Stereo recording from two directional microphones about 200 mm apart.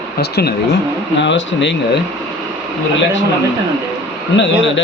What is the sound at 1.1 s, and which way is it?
Speech, 65° left (ahead or behind).